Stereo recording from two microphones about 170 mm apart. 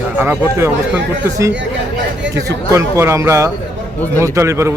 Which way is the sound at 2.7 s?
15° right (ahead or behind).